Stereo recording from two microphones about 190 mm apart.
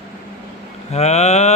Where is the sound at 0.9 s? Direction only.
35° left (ahead or behind).